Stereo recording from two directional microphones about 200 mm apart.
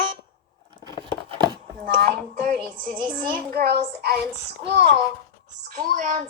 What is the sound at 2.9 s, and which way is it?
Speech, 25° right (ahead or behind).